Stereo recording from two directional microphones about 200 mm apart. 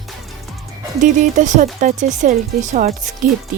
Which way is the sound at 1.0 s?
40° right (ahead or behind).